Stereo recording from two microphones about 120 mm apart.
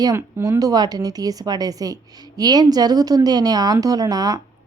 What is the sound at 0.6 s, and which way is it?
A woman's voice, 35° right (ahead or behind).